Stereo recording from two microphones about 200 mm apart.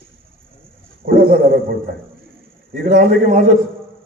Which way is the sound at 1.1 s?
45° right (ahead or behind).